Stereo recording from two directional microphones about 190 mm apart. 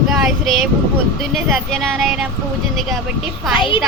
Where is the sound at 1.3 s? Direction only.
Centre (ahead or behind).